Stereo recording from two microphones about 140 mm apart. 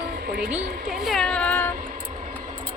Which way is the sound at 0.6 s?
70° right (ahead or behind).